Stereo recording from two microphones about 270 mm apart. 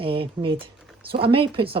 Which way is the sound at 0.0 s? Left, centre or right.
Centre.